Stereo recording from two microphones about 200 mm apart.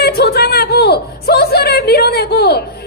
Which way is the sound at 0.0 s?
55° left (ahead or behind).